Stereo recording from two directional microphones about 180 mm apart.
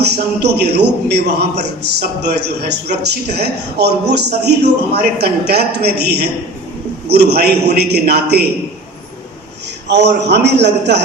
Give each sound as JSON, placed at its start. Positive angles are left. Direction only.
{"t": 0.0, "sound": "a man's voice", "side_deg": -65}
{"t": 9.9, "sound": "a man's voice", "side_deg": -70}